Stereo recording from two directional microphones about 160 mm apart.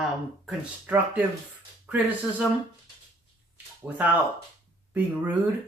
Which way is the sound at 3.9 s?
10° right (ahead or behind).